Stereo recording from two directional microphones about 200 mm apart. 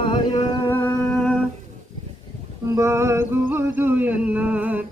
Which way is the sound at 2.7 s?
15° right (ahead or behind).